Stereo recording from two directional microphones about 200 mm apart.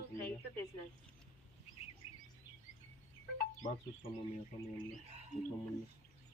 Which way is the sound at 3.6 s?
20° left (ahead or behind).